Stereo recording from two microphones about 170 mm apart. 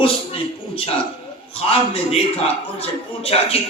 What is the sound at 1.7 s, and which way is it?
Speech, 35° left (ahead or behind).